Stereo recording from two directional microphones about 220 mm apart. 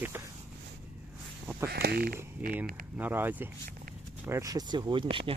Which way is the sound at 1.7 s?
45° right (ahead or behind).